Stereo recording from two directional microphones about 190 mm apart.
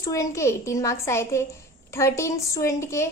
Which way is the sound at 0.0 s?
15° left (ahead or behind).